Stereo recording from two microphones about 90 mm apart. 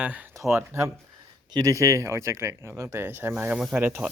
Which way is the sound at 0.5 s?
30° right (ahead or behind).